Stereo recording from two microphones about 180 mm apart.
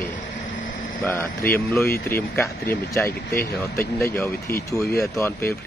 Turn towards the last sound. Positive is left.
turn(degrees=15)  # may be behind; listen again after turning